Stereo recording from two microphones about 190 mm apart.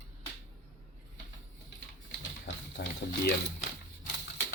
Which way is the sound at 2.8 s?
60° left (ahead or behind).